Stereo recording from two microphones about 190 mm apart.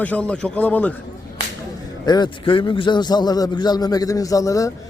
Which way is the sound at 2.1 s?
25° left (ahead or behind).